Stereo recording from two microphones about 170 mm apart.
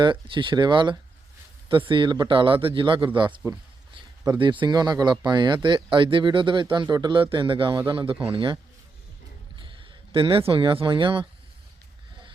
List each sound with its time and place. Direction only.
0.0 s a man's voice: 30° right (ahead or behind)
9.6 s speech: 30° right (ahead or behind)